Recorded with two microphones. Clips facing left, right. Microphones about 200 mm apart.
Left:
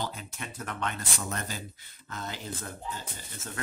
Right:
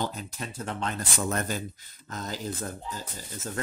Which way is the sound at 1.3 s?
45° right (ahead or behind).